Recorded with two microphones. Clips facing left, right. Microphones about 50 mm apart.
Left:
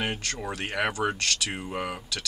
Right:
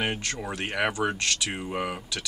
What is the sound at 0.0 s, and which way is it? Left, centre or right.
Speech, centre.